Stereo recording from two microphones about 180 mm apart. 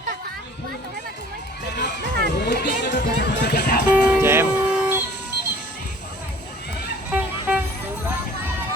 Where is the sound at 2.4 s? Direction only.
70° left (ahead or behind).